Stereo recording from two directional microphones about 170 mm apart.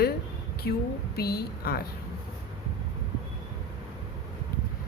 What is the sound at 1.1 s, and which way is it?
Speech, 65° left (ahead or behind).